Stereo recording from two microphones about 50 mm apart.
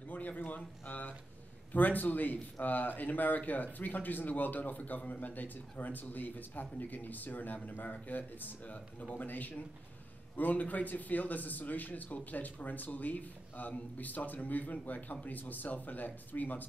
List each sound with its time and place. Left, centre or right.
0.1 s a man's voice: left